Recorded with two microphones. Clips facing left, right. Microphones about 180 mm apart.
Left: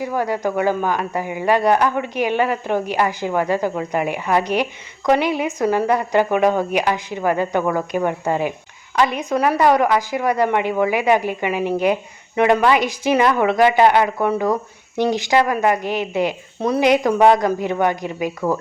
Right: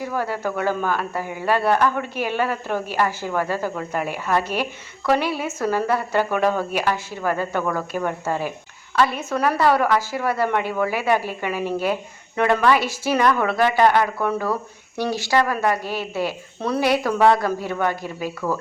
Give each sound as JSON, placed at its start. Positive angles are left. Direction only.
{"t": 0.0, "sound": "speech", "side_deg": 15}